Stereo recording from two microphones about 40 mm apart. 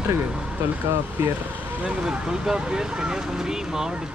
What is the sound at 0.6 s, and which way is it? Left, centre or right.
Speech, right.